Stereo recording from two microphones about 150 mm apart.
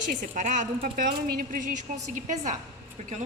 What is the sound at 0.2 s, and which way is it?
A woman's voice, 55° right (ahead or behind).